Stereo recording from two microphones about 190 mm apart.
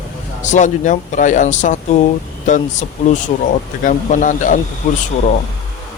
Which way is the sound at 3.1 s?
40° left (ahead or behind).